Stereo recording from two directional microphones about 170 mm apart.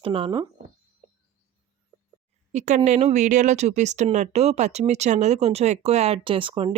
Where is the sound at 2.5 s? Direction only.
45° right (ahead or behind).